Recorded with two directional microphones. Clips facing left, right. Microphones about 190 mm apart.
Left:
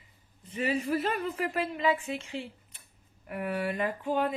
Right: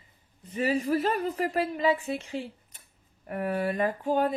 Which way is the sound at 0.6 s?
40° right (ahead or behind).